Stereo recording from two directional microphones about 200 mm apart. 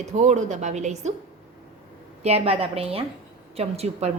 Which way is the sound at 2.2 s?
30° right (ahead or behind).